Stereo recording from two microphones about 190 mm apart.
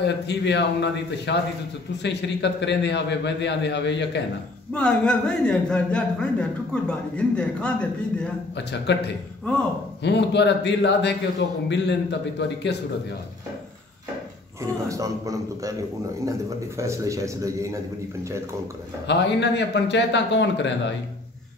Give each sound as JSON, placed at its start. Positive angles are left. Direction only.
{"t": 0.0, "sound": "a man's voice", "side_deg": 65}
{"t": 4.7, "sound": "a man's voice", "side_deg": 5}
{"t": 8.5, "sound": "a man's voice", "side_deg": 65}
{"t": 14.6, "sound": "a man's voice", "side_deg": -15}
{"t": 19.0, "sound": "a man's voice", "side_deg": 65}